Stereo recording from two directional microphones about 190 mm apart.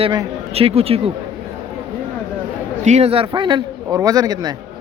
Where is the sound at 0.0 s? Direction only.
25° right (ahead or behind).